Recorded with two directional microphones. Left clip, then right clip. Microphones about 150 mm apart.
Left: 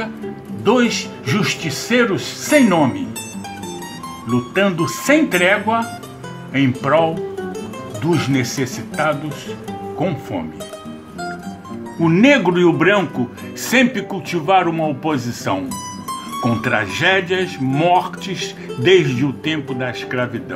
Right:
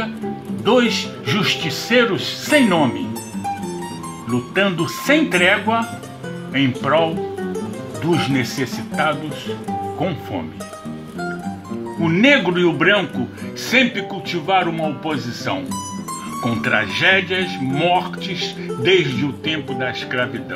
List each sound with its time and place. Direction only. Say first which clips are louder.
0.7 s speech: even; 10° right (ahead or behind)
4.3 s speech: left 1 dB; 5° right (ahead or behind)
12.0 s speech: left 1 dB; 10° left (ahead or behind)
16.4 s speech: even; 10° left (ahead or behind)